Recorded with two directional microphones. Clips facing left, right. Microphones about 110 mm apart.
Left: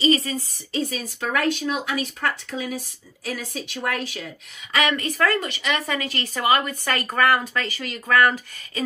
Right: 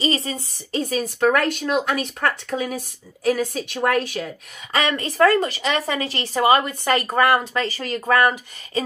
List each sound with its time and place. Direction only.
0.0 s speech: 30° right (ahead or behind)
0.7 s speech: 45° right (ahead or behind)
4.7 s speech: 30° right (ahead or behind)